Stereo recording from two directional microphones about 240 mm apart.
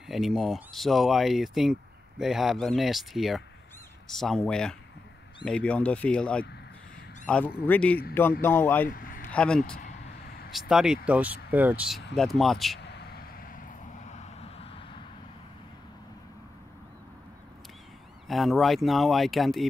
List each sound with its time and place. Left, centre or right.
0.0 s speech: centre
12.8 s vehicle: left
14.0 s vehicle: left
18.3 s speech: centre